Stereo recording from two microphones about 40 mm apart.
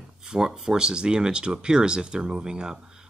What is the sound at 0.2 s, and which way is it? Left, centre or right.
Speech, centre.